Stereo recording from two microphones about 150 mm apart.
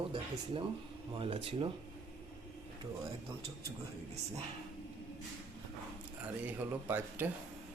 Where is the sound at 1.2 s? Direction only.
40° right (ahead or behind).